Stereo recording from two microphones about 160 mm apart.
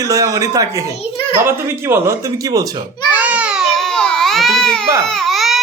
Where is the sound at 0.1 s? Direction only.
20° right (ahead or behind).